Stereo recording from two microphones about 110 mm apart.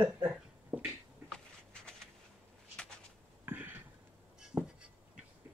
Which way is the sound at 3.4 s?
20° right (ahead or behind).